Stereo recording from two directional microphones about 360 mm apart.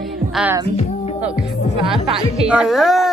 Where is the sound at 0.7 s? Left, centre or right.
Centre.